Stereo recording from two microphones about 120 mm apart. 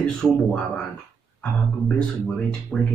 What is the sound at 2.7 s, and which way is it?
Speech, 10° left (ahead or behind).